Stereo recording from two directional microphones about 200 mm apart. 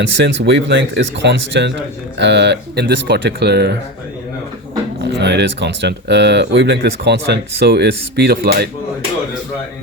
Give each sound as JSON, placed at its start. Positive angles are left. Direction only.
{"t": 0.0, "sound": "speech", "side_deg": -60}
{"t": 4.9, "sound": "speech", "side_deg": -60}